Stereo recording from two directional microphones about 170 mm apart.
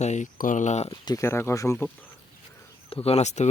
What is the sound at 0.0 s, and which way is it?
Speech, 45° left (ahead or behind).